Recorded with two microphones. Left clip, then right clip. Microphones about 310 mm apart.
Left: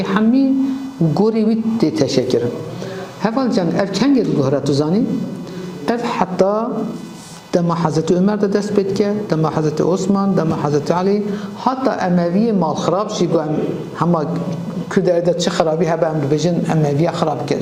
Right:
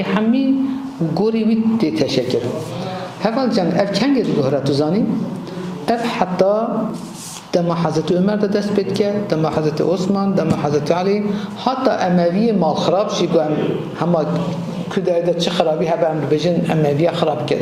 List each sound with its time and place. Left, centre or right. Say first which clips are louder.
1.1 s a man's voice: left 1 dB; left
3.2 s a woman's voice: even; left
14.9 s a man's voice: left 2 dB; left